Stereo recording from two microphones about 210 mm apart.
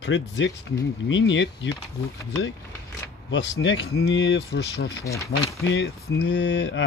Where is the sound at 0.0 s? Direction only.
60° left (ahead or behind).